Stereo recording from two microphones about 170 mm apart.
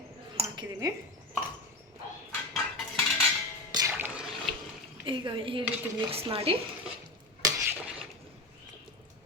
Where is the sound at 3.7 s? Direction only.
15° right (ahead or behind).